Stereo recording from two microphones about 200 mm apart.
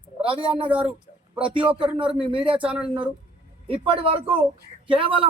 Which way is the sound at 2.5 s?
5° right (ahead or behind).